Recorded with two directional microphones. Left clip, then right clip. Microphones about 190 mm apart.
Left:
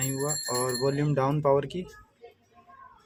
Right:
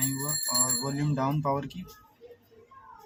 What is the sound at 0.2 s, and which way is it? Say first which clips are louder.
Speech: left 2 dB; 50° left (ahead or behind).